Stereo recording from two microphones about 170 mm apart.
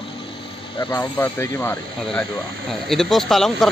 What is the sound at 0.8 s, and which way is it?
Speech, 15° left (ahead or behind).